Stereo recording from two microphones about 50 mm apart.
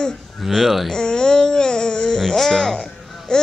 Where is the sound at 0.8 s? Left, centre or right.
Centre.